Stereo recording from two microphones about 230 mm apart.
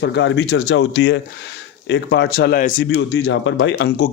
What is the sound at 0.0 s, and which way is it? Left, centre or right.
Speech, left.